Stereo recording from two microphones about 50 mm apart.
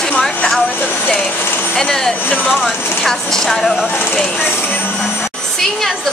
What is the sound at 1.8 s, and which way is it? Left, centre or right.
Speech, centre.